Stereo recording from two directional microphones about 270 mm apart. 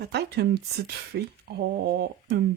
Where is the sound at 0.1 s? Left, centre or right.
Right.